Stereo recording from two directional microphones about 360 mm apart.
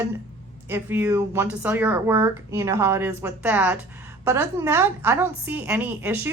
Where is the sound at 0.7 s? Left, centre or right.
Centre.